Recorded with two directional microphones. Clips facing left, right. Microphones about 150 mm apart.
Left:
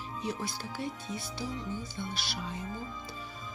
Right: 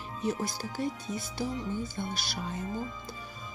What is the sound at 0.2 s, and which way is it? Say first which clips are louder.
Speech: right 5 dB; 45° right (ahead or behind).